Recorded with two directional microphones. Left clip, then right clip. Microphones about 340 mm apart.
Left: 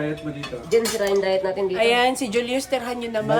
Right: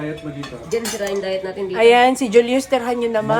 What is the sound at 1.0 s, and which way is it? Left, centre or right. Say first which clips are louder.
Speech: left 2 dB; centre.